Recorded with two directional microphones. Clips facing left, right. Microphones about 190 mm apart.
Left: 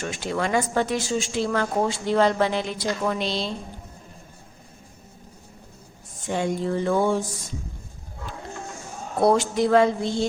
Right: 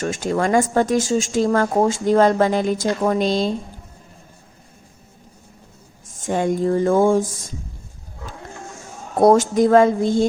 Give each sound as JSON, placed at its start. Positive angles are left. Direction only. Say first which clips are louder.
{"t": 0.0, "sound": "speech", "louder": "right 6 dB", "side_deg": -45}
{"t": 6.2, "sound": "speech", "louder": "right 6 dB", "side_deg": -50}
{"t": 9.1, "sound": "speech", "louder": "right 6 dB", "side_deg": -45}